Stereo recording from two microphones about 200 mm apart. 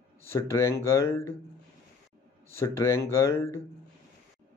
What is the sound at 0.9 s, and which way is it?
Speech, 15° left (ahead or behind).